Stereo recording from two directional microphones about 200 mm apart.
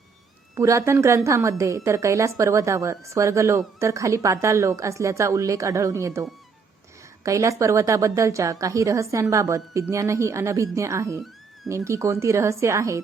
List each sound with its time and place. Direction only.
0.5 s a woman's voice: 15° right (ahead or behind)
7.3 s a woman's voice: 15° right (ahead or behind)